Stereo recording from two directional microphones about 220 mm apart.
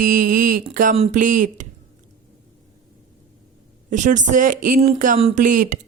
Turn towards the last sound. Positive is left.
turn(degrees=-35)  # may be behind; listen again after turning